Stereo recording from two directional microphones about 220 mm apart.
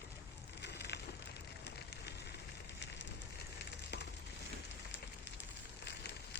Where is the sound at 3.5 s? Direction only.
50° left (ahead or behind).